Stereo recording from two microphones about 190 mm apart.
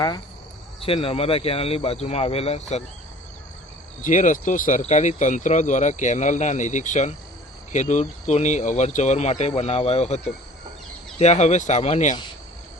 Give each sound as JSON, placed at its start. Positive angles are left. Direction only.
{"t": 0.8, "sound": "speech", "side_deg": 30}
{"t": 4.0, "sound": "speech", "side_deg": 40}